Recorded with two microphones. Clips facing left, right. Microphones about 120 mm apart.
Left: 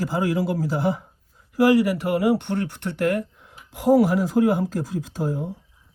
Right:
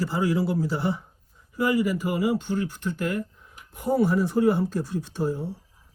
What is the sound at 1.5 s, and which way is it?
Speech, 85° left.